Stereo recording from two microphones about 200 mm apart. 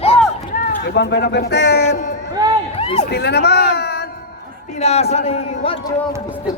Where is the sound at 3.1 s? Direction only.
55° left (ahead or behind).